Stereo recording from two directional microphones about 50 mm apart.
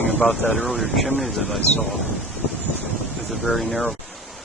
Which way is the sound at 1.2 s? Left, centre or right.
Centre.